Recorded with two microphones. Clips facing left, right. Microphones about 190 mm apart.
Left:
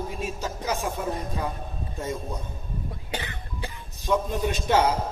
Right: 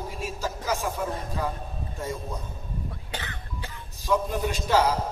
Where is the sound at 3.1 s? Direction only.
15° left (ahead or behind).